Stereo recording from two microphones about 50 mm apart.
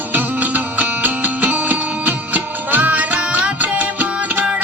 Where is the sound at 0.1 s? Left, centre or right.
Right.